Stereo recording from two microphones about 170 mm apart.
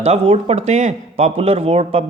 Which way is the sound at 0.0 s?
40° right (ahead or behind).